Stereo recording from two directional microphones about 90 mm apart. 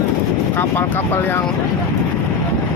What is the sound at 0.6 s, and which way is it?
Speech, 25° left (ahead or behind).